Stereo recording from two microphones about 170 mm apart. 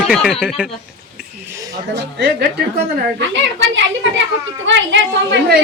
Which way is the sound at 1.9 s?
70° right (ahead or behind).